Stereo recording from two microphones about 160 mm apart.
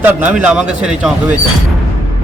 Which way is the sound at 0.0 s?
10° right (ahead or behind).